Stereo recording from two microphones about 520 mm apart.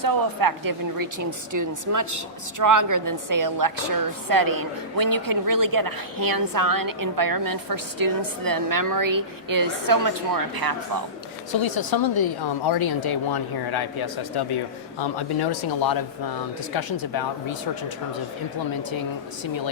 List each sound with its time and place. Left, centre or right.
0.0 s a woman's voice: right
11.6 s speech: left
14.5 s speech: left